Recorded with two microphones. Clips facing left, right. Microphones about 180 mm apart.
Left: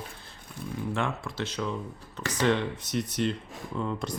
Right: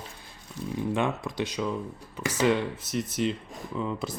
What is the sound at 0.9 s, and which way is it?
Speech, 20° right (ahead or behind).